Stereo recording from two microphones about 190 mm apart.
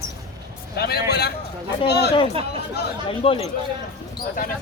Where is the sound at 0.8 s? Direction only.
55° left (ahead or behind).